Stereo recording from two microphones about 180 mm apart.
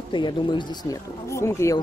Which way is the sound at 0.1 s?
25° left (ahead or behind).